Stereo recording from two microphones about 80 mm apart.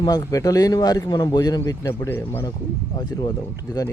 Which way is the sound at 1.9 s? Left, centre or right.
Left.